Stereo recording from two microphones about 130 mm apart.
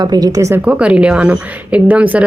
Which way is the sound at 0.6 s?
10° right (ahead or behind).